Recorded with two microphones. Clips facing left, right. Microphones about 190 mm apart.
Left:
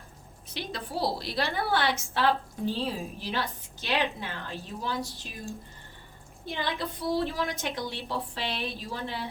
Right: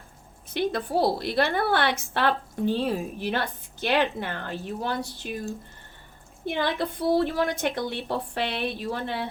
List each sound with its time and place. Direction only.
0.5 s a woman's voice: 55° right (ahead or behind)
6.4 s a woman's voice: 60° right (ahead or behind)